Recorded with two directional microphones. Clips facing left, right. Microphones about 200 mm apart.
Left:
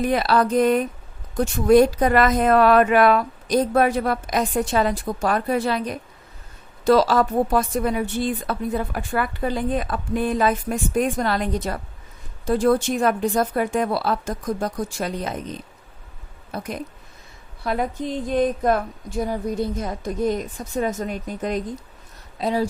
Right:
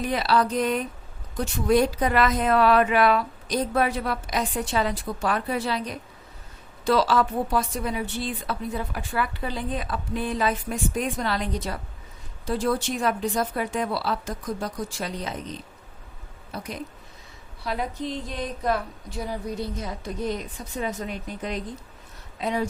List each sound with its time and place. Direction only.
0.0 s speech: 50° left (ahead or behind)
22.4 s speech: 35° left (ahead or behind)